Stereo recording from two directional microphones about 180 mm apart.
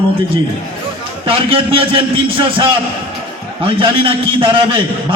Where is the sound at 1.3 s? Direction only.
30° right (ahead or behind).